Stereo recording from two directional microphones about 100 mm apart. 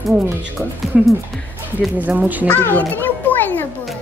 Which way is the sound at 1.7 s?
15° right (ahead or behind).